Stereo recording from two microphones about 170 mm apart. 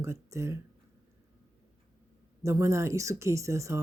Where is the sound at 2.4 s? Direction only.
15° right (ahead or behind).